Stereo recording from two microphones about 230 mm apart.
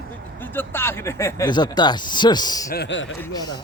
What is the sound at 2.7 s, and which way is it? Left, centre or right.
Speech, left.